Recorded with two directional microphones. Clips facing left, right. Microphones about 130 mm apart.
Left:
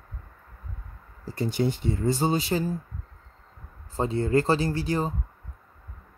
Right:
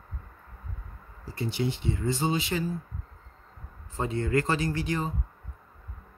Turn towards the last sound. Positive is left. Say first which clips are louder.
# left 3 dB
turn(degrees=35)  # may be behind; listen again after turning